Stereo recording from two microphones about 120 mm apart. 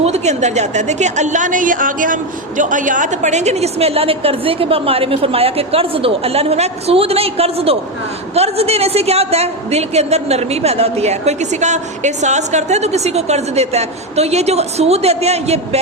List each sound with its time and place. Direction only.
0.0 s a woman's voice: 65° right (ahead or behind)